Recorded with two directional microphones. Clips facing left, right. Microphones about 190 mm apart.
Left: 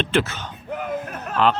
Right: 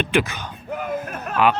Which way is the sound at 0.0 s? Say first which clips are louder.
Right 1 dB; 15° right (ahead or behind).